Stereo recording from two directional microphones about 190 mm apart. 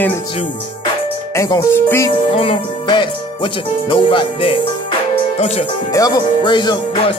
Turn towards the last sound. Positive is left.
turn(degrees=25)  # may be behind; listen again after turning